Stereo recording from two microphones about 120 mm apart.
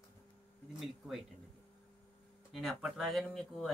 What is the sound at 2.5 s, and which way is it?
Speech, centre (ahead or behind).